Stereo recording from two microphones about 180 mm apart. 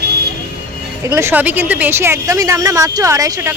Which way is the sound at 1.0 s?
15° right (ahead or behind).